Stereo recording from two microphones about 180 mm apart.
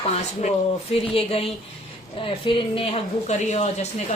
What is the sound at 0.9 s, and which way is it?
A woman's voice, 30° left (ahead or behind).